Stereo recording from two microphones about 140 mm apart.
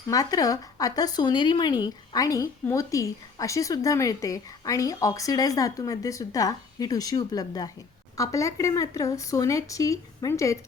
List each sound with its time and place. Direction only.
0.1 s a woman's voice: 25° left (ahead or behind)